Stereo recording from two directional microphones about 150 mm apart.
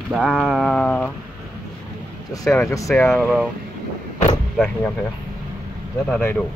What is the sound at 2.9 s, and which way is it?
Speech, 15° left (ahead or behind).